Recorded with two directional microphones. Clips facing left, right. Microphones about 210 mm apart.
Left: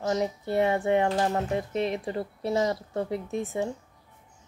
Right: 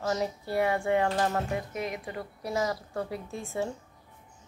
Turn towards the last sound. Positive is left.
turn(degrees=20)  # may be behind; listen again after turning